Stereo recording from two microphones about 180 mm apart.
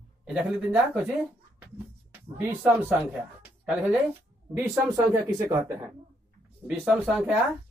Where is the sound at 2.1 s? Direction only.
10° right (ahead or behind).